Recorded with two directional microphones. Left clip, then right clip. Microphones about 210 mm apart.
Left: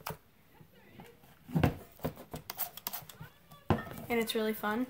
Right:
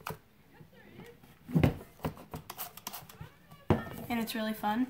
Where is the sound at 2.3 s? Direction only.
10° left (ahead or behind).